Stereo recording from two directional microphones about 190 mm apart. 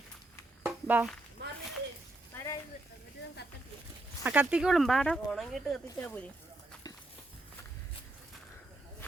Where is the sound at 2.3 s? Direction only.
15° left (ahead or behind).